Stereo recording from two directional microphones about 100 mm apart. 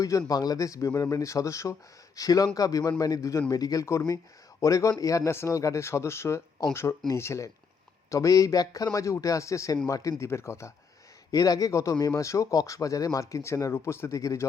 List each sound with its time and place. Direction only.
0.0 s speech: 35° left (ahead or behind)